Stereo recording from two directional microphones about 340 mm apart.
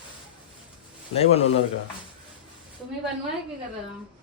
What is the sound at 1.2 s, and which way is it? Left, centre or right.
Speech, centre.